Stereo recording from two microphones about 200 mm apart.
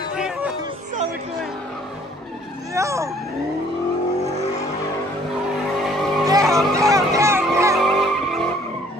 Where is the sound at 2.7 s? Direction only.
15° right (ahead or behind).